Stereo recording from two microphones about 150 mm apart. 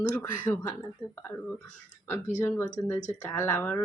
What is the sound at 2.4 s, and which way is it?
Speech, 10° left (ahead or behind).